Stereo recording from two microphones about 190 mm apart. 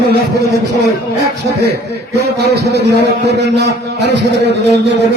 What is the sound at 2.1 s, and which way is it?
A man's voice, 60° right (ahead or behind).